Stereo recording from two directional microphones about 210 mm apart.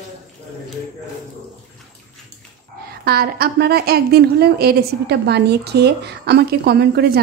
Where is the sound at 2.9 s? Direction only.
50° right (ahead or behind).